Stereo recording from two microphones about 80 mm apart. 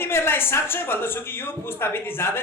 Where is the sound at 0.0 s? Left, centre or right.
Left.